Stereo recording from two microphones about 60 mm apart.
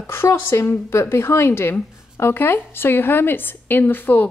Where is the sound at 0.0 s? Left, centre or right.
Left.